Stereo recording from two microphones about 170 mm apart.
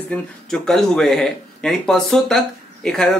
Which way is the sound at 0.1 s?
5° left (ahead or behind).